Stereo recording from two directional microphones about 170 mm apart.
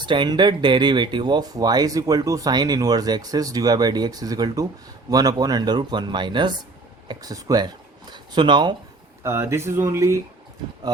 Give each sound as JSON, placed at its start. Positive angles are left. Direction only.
{"t": 0.0, "sound": "speech", "side_deg": -25}
{"t": 9.2, "sound": "speech", "side_deg": -15}